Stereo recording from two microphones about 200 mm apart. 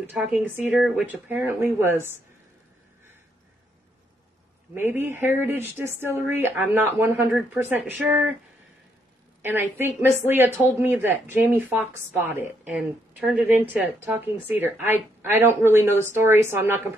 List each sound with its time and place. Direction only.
0.0 s a woman's voice: 5° right (ahead or behind)
4.7 s speech: 10° right (ahead or behind)
9.4 s speech: 10° right (ahead or behind)